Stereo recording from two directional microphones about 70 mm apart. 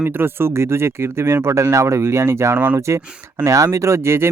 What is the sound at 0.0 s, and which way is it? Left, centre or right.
Speech, right.